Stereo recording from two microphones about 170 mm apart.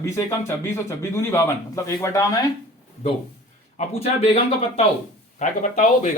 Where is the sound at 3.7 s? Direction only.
40° left (ahead or behind).